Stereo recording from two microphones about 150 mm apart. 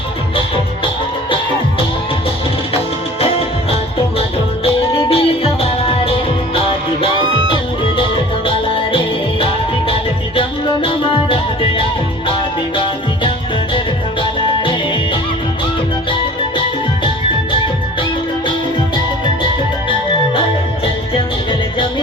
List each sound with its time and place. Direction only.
3.2 s music: 40° left (ahead or behind)
8.4 s music: 35° left (ahead or behind)
12.7 s music: 35° left (ahead or behind)